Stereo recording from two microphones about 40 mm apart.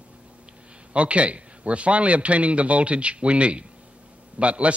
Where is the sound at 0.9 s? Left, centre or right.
Right.